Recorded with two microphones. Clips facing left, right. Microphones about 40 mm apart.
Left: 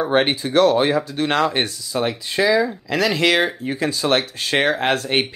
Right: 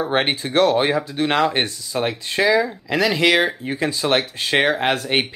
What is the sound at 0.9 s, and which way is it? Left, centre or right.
Speech, centre.